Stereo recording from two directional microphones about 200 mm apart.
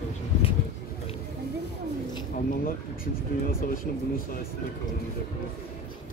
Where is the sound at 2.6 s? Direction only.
45° left (ahead or behind).